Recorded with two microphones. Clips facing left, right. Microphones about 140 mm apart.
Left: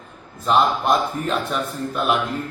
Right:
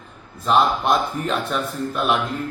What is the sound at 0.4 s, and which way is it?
A man's voice, centre (ahead or behind).